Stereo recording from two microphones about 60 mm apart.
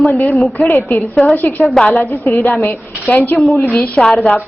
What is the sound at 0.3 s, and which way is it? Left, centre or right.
Speech, centre.